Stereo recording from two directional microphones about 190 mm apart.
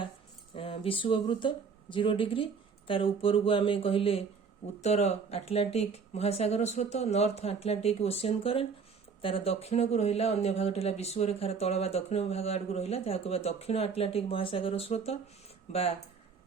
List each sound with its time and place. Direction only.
0.5 s speech: 30° left (ahead or behind)